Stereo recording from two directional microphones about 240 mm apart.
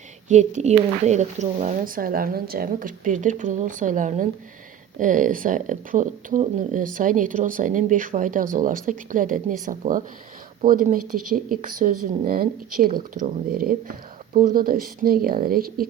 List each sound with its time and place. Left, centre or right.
0.3 s speech: right